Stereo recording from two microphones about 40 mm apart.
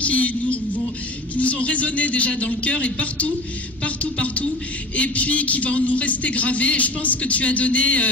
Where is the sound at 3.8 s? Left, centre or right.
Left.